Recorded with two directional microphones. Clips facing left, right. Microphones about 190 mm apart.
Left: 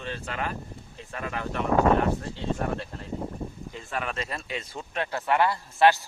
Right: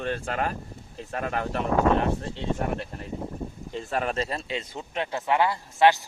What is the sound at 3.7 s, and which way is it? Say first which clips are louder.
Speech: right 7 dB; 35° right (ahead or behind).